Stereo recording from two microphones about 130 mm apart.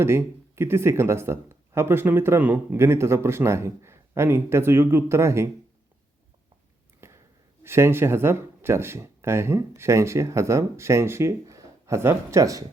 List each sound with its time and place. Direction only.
0.0 s speech: 20° right (ahead or behind)
7.0 s a sound: 20° right (ahead or behind)
7.6 s speech: 20° right (ahead or behind)